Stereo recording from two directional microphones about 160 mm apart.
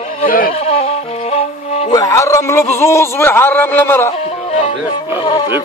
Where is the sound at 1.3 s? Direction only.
40° left (ahead or behind).